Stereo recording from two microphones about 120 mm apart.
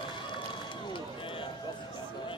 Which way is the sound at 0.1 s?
40° left (ahead or behind).